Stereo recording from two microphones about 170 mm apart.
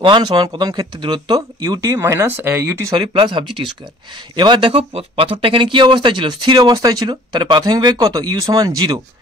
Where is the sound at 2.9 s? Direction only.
30° right (ahead or behind).